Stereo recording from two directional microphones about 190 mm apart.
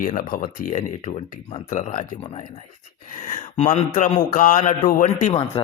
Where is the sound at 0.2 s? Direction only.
45° left (ahead or behind).